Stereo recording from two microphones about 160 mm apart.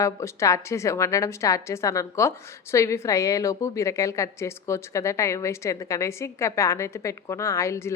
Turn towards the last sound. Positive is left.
turn(degrees=15)  # may be behind; listen again after turning